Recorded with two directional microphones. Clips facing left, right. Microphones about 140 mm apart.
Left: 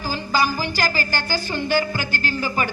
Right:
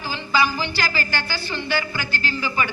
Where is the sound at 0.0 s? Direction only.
40° left (ahead or behind).